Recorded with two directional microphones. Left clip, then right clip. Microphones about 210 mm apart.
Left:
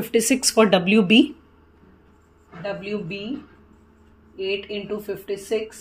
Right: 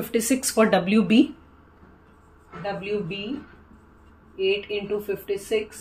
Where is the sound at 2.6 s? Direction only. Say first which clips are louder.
Right 1 dB; 30° left (ahead or behind).